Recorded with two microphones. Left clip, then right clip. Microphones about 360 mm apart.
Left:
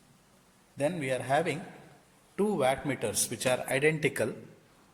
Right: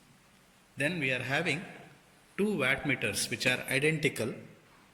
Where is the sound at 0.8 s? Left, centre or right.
Left.